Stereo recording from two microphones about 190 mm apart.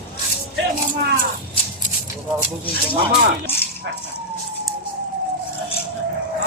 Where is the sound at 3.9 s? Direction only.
80° right.